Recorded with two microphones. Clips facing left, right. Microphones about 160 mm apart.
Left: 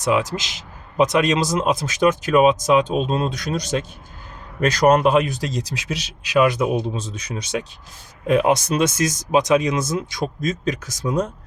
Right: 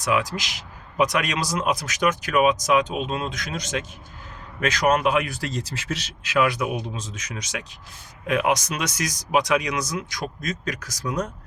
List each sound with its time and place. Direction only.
0.0 s a man's voice: 25° left (ahead or behind)